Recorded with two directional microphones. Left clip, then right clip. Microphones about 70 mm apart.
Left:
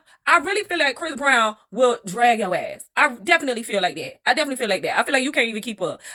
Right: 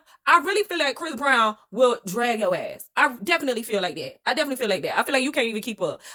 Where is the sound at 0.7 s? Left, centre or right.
Right.